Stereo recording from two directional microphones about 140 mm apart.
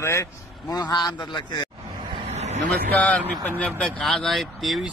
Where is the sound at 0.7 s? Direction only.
30° left (ahead or behind).